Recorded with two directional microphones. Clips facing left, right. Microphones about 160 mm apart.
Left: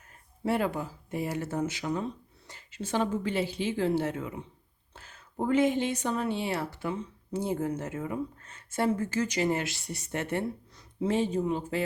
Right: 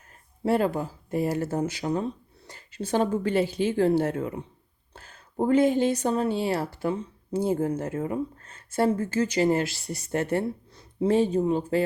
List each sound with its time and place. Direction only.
0.4 s speech: 35° right (ahead or behind)